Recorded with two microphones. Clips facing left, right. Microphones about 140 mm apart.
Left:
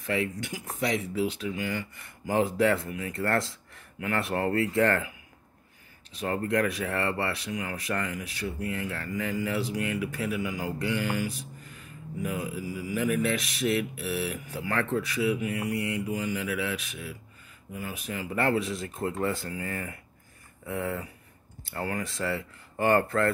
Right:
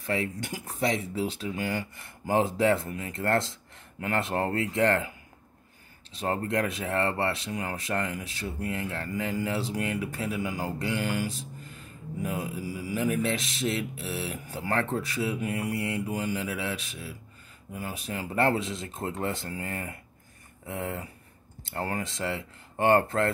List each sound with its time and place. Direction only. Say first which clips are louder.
0.0 s speech: left 1 dB; 35° right (ahead or behind)
6.1 s speech: left 1 dB; 30° right (ahead or behind)